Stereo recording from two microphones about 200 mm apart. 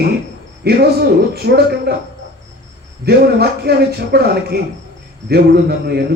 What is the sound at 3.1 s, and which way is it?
A man's voice, 55° right (ahead or behind).